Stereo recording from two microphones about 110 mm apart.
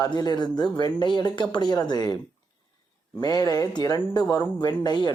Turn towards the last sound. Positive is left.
turn(degrees=40)  # may be behind; listen again after turning